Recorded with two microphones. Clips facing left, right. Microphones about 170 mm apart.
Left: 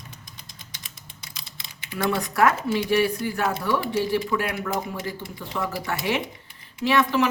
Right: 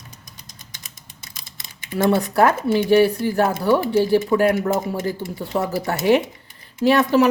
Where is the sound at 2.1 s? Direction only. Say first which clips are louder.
Right 4 dB; 30° right (ahead or behind).